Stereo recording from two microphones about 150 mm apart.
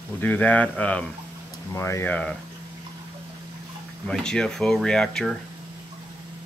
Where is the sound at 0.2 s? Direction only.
10° left (ahead or behind).